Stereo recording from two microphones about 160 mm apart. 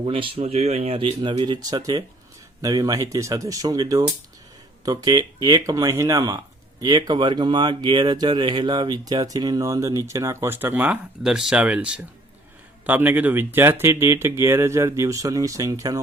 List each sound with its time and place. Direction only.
0.0 s speech: 35° right (ahead or behind)